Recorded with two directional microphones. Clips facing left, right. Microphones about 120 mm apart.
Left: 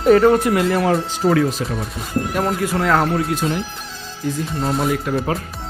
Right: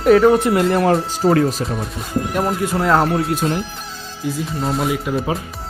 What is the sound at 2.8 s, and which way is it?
Speech, 25° right (ahead or behind).